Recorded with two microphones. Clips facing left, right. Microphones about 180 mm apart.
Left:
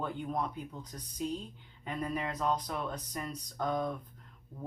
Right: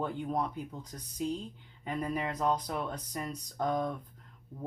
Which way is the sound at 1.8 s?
25° right (ahead or behind).